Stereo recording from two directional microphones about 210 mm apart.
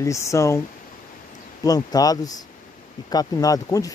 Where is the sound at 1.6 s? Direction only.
15° left (ahead or behind).